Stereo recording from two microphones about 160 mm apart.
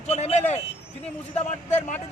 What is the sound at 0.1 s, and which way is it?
Vehicle, 45° left (ahead or behind).